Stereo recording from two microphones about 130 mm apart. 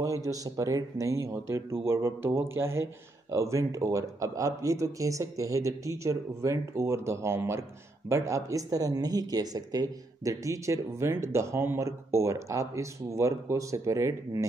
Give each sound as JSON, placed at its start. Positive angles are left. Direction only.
{"t": 0.0, "sound": "speech", "side_deg": -25}